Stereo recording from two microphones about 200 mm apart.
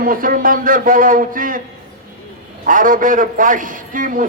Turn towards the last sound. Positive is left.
turn(degrees=-40)  # may be behind; listen again after turning